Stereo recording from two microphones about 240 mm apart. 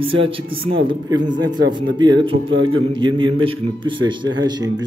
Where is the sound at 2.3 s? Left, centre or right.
Right.